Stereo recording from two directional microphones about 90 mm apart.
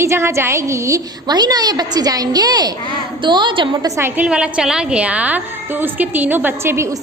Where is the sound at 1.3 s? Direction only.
50° right (ahead or behind).